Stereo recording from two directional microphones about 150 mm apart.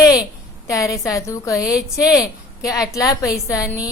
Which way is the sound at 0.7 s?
20° left (ahead or behind).